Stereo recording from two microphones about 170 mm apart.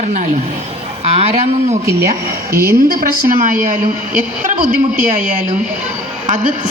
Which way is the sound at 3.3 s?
55° right (ahead or behind).